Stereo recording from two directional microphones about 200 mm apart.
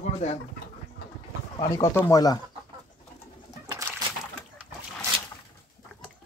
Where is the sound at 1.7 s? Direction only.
15° left (ahead or behind).